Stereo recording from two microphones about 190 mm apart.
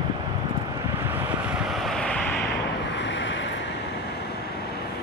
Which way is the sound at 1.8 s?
5° left (ahead or behind).